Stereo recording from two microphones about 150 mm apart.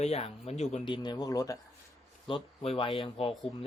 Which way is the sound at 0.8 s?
30° left (ahead or behind).